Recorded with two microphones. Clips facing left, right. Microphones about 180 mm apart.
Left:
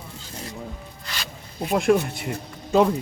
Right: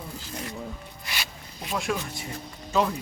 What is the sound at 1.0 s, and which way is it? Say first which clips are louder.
Music: even; 10° right (ahead or behind).